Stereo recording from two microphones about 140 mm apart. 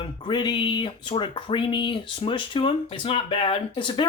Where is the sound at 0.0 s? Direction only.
35° left (ahead or behind).